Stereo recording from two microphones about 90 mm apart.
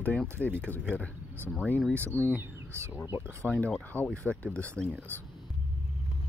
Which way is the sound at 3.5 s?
15° left (ahead or behind).